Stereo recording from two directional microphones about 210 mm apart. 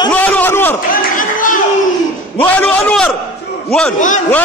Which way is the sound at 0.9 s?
40° left (ahead or behind).